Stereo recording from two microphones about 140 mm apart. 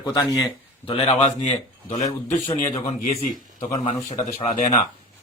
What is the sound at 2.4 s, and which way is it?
A man's voice, 50° left (ahead or behind).